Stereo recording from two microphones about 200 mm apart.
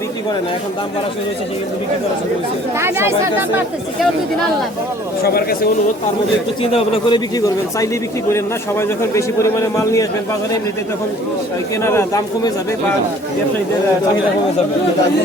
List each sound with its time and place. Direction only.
2.7 s speech: 10° right (ahead or behind)
5.2 s speech: 50° left (ahead or behind)
6.6 s a man's voice: 25° left (ahead or behind)
7.3 s a man's voice: 15° left (ahead or behind)
11.8 s a man's voice: 10° left (ahead or behind)